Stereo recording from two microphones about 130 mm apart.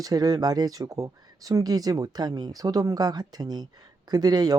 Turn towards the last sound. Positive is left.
turn(degrees=-30)  # may be behind; listen again after turning